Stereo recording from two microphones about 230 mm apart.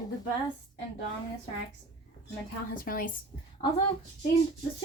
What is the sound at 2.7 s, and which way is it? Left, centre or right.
Speech, left.